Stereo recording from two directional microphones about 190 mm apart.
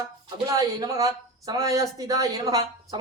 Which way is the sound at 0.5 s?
20° right (ahead or behind).